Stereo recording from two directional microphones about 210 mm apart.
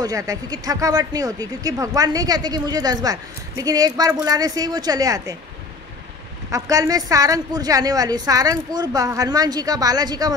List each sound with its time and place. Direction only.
0.0 s speech: 15° right (ahead or behind)
6.5 s speech: 15° right (ahead or behind)